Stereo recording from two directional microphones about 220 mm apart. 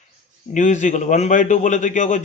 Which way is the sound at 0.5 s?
35° left (ahead or behind).